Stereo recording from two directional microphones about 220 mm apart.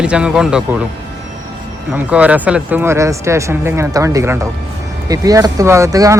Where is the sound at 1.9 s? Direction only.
5° right (ahead or behind).